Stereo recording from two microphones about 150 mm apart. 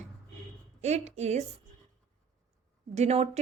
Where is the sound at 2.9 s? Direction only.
45° right (ahead or behind).